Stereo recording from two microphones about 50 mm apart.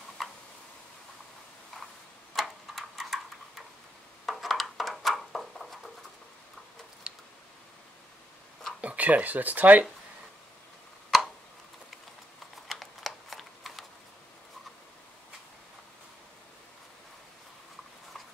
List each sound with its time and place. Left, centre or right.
0.2 s tick-tock: centre
2.3 s tick-tock: centre
4.3 s a sound: centre
8.8 s speech: right
11.1 s tick: centre
12.6 s typing: centre